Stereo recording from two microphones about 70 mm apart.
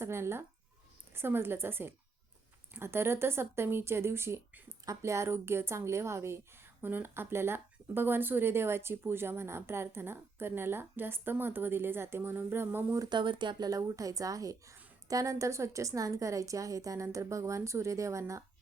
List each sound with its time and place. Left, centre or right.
0.0 s a sound: right
1.1 s speech: right
6.8 s speech: right
13.1 s speech: right